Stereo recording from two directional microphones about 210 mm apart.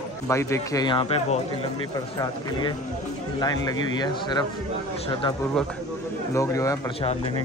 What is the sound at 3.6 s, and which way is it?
Speech, 20° left (ahead or behind).